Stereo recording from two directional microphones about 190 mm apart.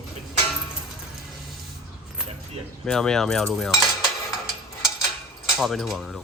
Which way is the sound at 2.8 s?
5° left (ahead or behind).